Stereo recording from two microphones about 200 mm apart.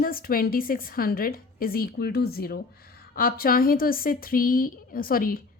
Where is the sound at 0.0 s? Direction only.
45° left (ahead or behind).